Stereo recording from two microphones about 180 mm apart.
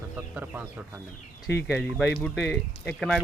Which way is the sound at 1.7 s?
5° left (ahead or behind).